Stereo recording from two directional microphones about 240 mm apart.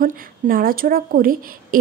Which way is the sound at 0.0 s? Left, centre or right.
Right.